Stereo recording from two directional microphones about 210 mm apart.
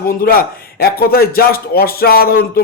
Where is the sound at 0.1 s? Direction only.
45° left (ahead or behind).